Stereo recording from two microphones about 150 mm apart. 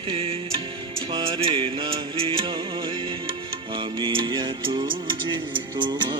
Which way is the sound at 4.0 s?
35° right (ahead or behind).